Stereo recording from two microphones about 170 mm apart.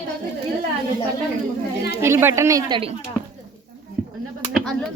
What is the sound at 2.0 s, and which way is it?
Speech, 15° right (ahead or behind).